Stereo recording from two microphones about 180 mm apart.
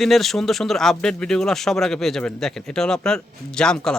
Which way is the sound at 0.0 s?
Centre (ahead or behind).